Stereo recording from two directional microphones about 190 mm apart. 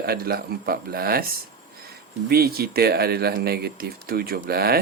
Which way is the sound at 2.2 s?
55° right (ahead or behind).